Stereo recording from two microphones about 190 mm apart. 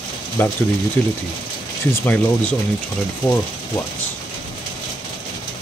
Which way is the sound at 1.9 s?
5° left (ahead or behind).